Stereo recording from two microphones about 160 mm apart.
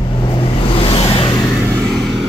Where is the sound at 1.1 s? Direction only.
30° left (ahead or behind).